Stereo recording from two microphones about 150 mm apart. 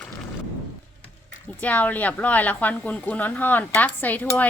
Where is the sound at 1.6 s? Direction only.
10° left (ahead or behind).